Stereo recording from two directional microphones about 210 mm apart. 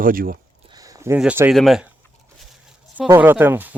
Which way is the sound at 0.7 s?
15° right (ahead or behind).